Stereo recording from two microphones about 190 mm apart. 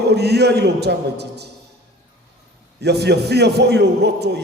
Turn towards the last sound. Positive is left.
turn(degrees=-60)  # may be behind; listen again after turning